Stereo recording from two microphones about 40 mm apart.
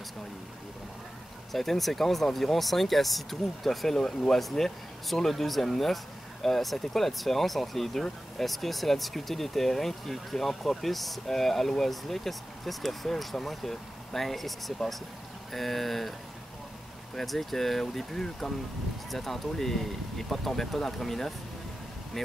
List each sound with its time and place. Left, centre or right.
1.5 s speech: centre